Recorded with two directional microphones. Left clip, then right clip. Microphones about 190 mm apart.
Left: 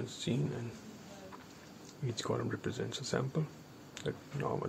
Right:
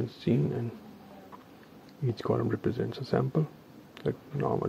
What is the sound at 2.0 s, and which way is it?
Speech, 30° right (ahead or behind).